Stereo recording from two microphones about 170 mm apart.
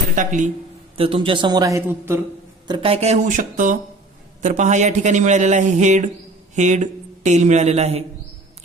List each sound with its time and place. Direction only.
0.2 s speech: 50° right (ahead or behind)
0.9 s a woman's voice: 30° right (ahead or behind); by 2.2 s 15° right (ahead or behind)
2.6 s speech: 30° right (ahead or behind)